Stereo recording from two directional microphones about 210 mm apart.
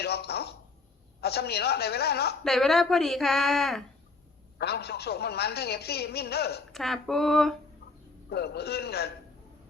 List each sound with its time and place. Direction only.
0.0 s a sound: 50° left (ahead or behind)
1.2 s a woman's voice: 50° left (ahead or behind)
2.4 s a woman's voice: centre (ahead or behind)
4.5 s a woman's voice: 50° left (ahead or behind)
6.7 s a woman's voice: centre (ahead or behind)
8.3 s a woman's voice: 50° left (ahead or behind)